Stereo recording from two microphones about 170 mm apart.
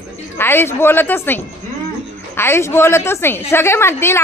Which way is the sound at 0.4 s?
15° left (ahead or behind).